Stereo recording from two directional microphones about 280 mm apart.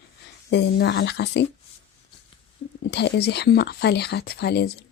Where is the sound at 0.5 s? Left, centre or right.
Left.